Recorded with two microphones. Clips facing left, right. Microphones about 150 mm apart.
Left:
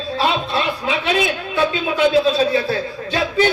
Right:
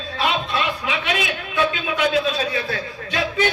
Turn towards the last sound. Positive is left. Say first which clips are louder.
# left 4 dB
turn(degrees=30)  # may be behind; listen again after turning